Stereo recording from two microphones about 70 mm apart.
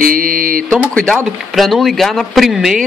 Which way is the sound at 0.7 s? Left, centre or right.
Centre.